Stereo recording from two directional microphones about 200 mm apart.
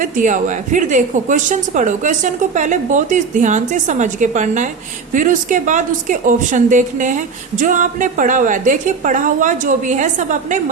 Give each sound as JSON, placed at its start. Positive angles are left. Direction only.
{"t": 0.0, "sound": "speech", "side_deg": -40}